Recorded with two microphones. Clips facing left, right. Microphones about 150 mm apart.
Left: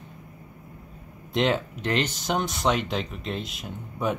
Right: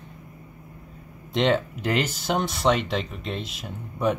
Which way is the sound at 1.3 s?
Centre (ahead or behind).